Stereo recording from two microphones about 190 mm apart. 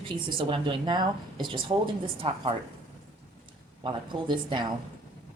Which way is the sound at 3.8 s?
25° right (ahead or behind).